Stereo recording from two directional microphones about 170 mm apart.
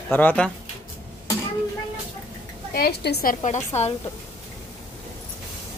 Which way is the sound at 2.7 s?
65° left (ahead or behind).